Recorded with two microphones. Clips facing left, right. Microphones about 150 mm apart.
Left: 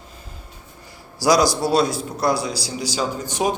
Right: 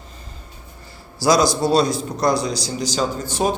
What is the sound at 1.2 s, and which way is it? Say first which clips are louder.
A man's voice: right 1 dB; 10° left (ahead or behind).